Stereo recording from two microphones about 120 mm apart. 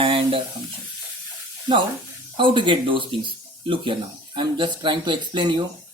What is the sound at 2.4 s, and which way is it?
Speech, 45° right (ahead or behind).